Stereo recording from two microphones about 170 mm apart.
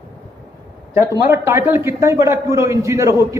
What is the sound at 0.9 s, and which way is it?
A man's voice, 15° right (ahead or behind).